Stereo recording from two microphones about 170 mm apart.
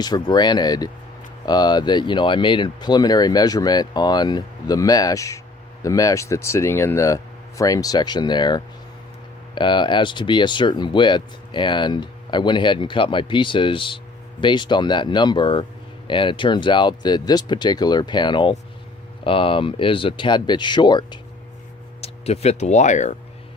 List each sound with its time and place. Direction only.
0.0 s speech: 25° left (ahead or behind)
22.0 s speech: 40° left (ahead or behind)